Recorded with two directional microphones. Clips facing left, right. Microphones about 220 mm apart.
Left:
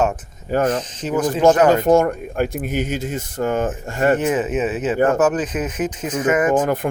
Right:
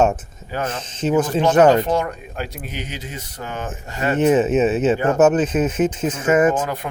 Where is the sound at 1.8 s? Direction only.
50° left (ahead or behind).